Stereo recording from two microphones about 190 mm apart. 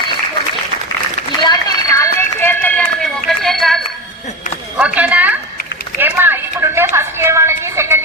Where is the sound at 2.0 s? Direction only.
10° left (ahead or behind).